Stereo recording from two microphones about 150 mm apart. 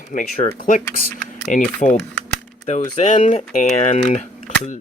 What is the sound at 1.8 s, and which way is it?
Speech, 50° left (ahead or behind).